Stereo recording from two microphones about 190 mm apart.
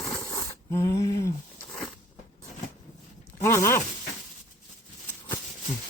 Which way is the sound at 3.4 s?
15° left (ahead or behind).